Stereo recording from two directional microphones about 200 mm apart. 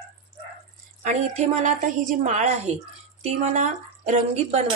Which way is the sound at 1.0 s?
35° right (ahead or behind).